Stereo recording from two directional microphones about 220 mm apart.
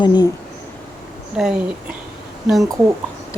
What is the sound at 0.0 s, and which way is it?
Speech, 20° left (ahead or behind).